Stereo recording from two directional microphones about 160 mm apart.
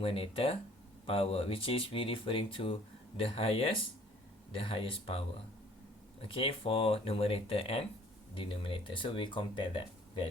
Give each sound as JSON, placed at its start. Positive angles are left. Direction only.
{"t": 0.0, "sound": "speech", "side_deg": 35}
{"t": 6.2, "sound": "speech", "side_deg": 35}